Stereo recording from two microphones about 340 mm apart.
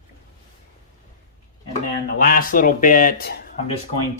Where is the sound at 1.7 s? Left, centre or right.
Left.